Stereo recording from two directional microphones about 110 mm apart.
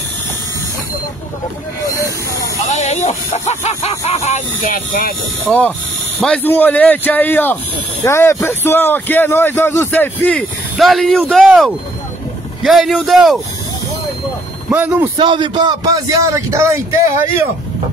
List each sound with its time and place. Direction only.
1.9 s hiss: 30° left (ahead or behind)
2.6 s speech: 90° left
5.5 s a man's voice: 10° left (ahead or behind)
10.3 s speech: centre (ahead or behind)
14.7 s speech: 15° right (ahead or behind)
15.1 s a man's voice: 45° right (ahead or behind); by 17.2 s 25° right (ahead or behind)